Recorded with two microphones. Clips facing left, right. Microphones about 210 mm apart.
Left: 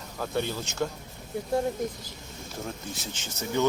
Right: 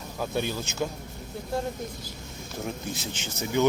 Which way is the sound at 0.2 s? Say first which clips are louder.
Right 1 dB; 10° right (ahead or behind).